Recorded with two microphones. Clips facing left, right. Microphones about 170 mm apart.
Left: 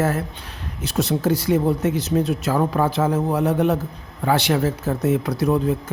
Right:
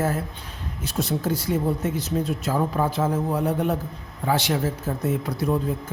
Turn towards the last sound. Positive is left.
turn(degrees=75)  # may be behind; listen again after turning